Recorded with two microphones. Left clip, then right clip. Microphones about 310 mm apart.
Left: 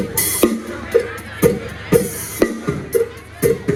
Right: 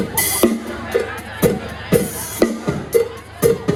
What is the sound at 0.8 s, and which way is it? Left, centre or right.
Music, right.